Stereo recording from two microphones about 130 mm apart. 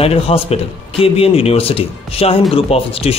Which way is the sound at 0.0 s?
50° left (ahead or behind).